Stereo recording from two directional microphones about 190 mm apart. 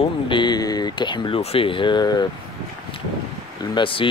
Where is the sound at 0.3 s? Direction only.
25° left (ahead or behind).